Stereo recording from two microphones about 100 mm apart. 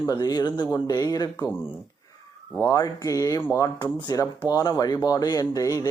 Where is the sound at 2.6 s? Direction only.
35° left (ahead or behind).